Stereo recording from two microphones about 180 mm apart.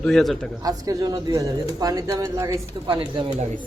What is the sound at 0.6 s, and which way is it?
A man's voice, 20° right (ahead or behind).